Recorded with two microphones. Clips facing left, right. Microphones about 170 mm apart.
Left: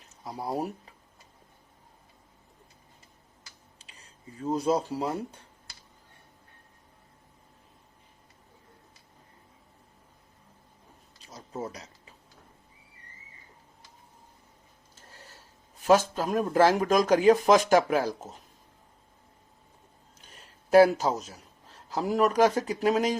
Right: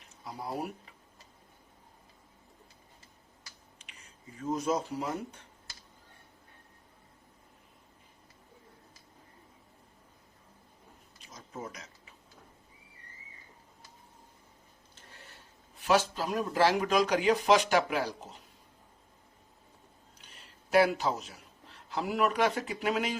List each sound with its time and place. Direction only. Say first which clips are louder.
0.3 s speech: left 5 dB; 35° left (ahead or behind)
3.8 s speech: left 1 dB; 35° left (ahead or behind)
11.3 s a sound: left 6 dB; 35° left (ahead or behind)
15.8 s speech: left 5 dB; 45° left (ahead or behind)
20.1 s a man's voice: left 5 dB; 45° left (ahead or behind)